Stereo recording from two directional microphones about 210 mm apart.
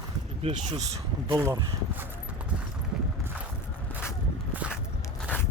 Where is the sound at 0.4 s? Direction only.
30° right (ahead or behind).